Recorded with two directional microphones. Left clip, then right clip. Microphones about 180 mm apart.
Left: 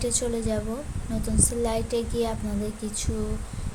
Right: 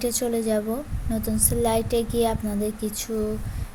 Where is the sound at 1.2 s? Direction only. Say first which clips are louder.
Right 3 dB; 20° right (ahead or behind).